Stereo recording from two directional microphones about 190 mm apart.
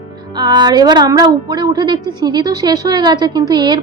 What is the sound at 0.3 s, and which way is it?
A woman's voice, 20° right (ahead or behind).